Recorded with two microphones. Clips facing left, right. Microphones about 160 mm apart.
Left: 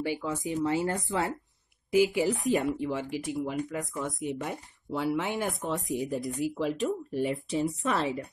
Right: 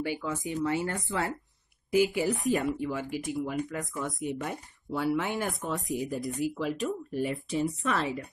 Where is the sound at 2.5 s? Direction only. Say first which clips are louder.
Left 1 dB; 20° left (ahead or behind).